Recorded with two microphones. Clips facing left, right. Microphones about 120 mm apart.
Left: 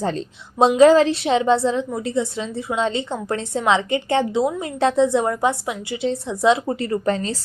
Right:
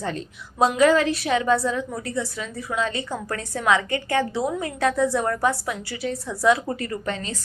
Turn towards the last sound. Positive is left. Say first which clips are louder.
# left 7 dB
turn(degrees=35)  # may be behind; listen again after turning